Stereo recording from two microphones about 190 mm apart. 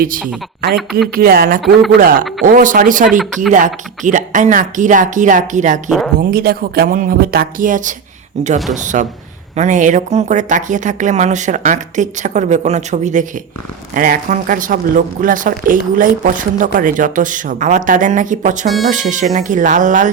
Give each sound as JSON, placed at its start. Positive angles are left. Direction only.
{"t": 0.0, "sound": "speech", "side_deg": -50}
{"t": 0.8, "sound": "speech", "side_deg": 0}
{"t": 1.1, "sound": "speech", "side_deg": -50}
{"t": 3.1, "sound": "speech", "side_deg": 0}
{"t": 3.5, "sound": "speech", "side_deg": -40}
{"t": 6.1, "sound": "speech", "side_deg": -55}